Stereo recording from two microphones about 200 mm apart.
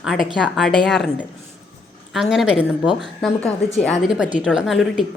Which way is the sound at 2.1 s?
Centre (ahead or behind).